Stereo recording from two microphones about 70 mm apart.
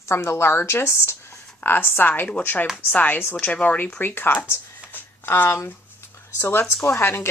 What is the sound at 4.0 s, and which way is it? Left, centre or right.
Speech, left.